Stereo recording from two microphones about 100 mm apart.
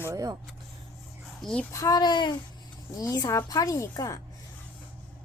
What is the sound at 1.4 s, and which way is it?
Speech, 5° left (ahead or behind).